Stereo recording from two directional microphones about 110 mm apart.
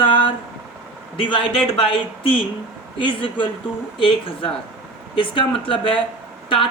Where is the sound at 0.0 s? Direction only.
50° left (ahead or behind).